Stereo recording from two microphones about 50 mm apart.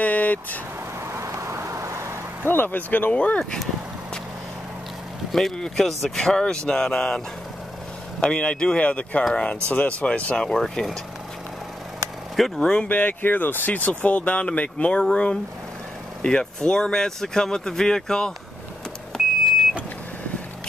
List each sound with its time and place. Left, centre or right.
0.0 s vehicle: left
1.0 s vehicle: right
2.4 s speech: left
3.1 s speech: left
5.3 s speech: centre
10.6 s speech: centre
12.5 s speech: centre
12.8 s speech: left; by 18.3 s centre